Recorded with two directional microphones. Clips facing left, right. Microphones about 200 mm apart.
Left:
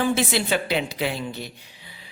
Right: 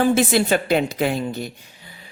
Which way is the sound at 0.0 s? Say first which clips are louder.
Right 5 dB; 45° right (ahead or behind).